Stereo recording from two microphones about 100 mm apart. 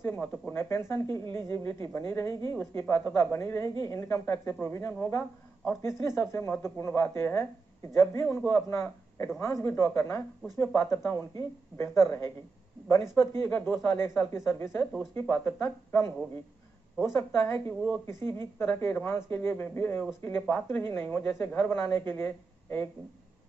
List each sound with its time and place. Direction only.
0.0 s speech: 25° left (ahead or behind)